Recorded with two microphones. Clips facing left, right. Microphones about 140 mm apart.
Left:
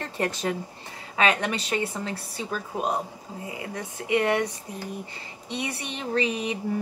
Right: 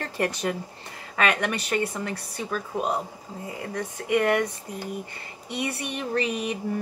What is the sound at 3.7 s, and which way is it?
Speech, 50° right (ahead or behind).